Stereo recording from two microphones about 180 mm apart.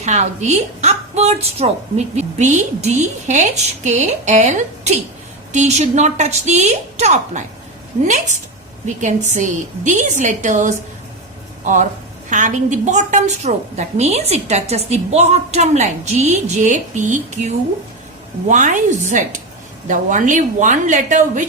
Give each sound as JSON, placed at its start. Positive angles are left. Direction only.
{"t": 0.0, "sound": "a woman's voice", "side_deg": -40}